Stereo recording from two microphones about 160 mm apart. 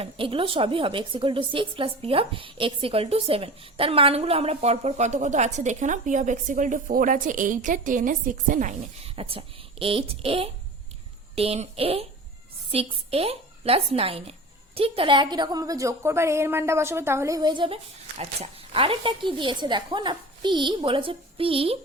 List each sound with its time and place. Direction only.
0.0 s a woman's voice: 35° right (ahead or behind); by 8.7 s 55° right (ahead or behind)
9.0 s a woman's voice: 35° right (ahead or behind)